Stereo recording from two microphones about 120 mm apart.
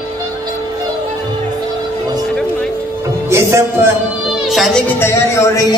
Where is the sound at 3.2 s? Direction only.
25° right (ahead or behind).